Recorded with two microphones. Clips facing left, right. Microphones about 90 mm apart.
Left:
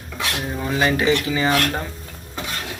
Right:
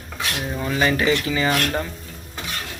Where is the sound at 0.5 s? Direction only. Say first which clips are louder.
Even; 5° left (ahead or behind).